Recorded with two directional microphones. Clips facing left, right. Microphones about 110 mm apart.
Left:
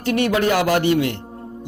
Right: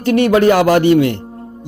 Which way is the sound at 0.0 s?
40° right (ahead or behind).